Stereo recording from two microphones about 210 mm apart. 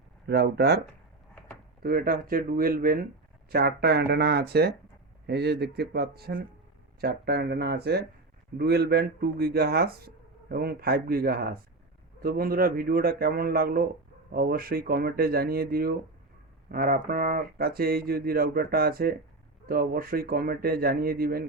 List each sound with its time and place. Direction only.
0.3 s speech: 50° right (ahead or behind)
1.8 s speech: 45° right (ahead or behind)